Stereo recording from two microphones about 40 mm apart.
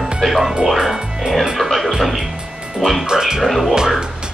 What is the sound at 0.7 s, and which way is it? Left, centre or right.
Speech, centre.